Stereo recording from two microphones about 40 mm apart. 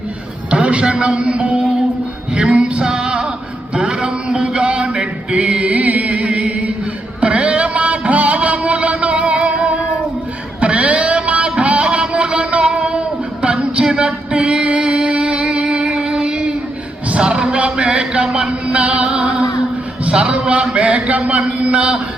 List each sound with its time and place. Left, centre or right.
0.5 s a man's voice: right
2.3 s music: right
3.8 s male singing: right
7.2 s a sound: right
14.3 s music: right
20.1 s a sound: right